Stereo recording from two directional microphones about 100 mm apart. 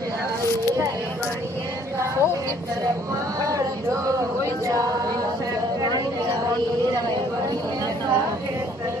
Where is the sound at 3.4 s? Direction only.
35° right (ahead or behind).